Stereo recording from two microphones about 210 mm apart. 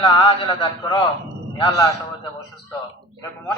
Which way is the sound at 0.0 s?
20° left (ahead or behind).